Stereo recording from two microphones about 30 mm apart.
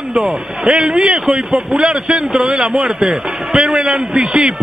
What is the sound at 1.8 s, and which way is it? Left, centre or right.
Speech, right.